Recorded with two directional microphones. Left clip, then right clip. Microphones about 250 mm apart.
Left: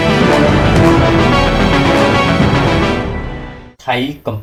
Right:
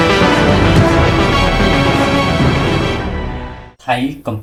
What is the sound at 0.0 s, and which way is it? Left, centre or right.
Music, centre.